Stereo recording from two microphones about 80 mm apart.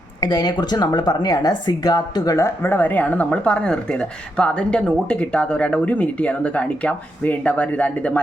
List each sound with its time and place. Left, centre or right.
0.2 s speech: left
2.6 s speech: left